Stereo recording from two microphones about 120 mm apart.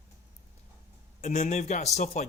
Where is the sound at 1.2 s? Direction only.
90° left.